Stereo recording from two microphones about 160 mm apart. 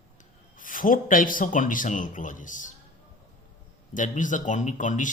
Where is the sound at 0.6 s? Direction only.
55° left (ahead or behind).